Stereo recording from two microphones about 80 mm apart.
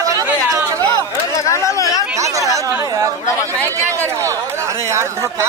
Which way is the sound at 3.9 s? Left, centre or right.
Right.